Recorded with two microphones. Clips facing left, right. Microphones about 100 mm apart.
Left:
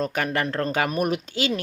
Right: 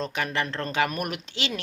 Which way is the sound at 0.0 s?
45° left (ahead or behind).